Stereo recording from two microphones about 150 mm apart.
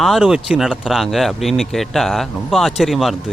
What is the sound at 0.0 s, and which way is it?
A man's voice, centre (ahead or behind).